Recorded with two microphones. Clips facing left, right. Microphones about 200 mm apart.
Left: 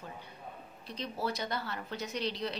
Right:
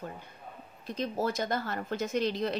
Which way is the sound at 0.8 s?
45° right (ahead or behind).